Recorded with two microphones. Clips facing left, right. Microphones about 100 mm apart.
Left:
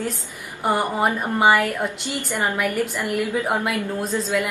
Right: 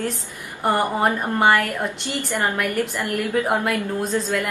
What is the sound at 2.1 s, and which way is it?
A woman's voice, 15° left (ahead or behind).